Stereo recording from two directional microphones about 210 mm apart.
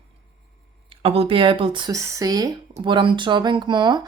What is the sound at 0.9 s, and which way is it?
Speech, 25° right (ahead or behind).